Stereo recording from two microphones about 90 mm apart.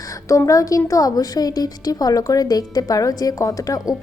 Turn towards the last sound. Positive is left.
turn(degrees=40)  # may be behind; listen again after turning